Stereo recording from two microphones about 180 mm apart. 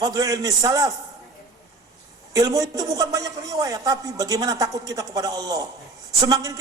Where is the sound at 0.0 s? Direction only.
20° right (ahead or behind).